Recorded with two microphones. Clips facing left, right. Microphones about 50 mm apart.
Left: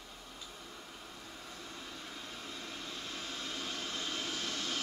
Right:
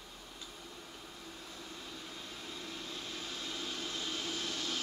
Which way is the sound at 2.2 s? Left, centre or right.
Left.